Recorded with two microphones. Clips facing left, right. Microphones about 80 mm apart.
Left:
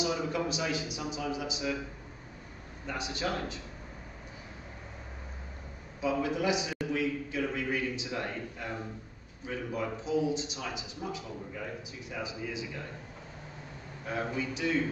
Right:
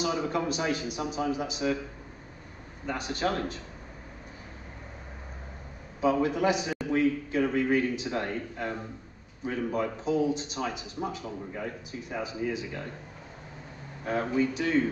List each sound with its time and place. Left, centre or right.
0.0 s a man's voice: right
2.9 s a man's voice: right
5.9 s a man's voice: right
14.0 s a man's voice: right